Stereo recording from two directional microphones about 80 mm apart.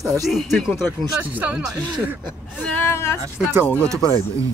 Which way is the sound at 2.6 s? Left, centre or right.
Left.